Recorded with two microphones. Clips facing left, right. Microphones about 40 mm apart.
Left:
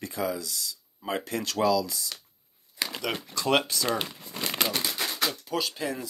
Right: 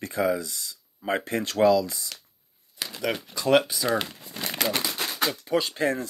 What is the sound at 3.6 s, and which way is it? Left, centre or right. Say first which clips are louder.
Speech: right 2 dB; centre.